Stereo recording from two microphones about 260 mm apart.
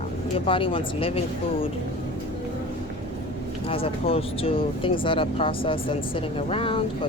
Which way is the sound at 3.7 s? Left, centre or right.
Left.